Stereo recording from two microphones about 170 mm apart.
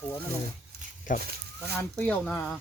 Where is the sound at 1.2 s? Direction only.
65° right (ahead or behind).